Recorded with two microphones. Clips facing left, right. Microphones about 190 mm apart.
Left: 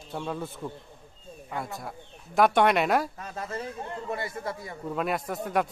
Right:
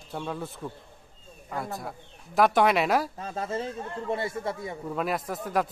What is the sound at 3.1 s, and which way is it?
Speech, 25° right (ahead or behind).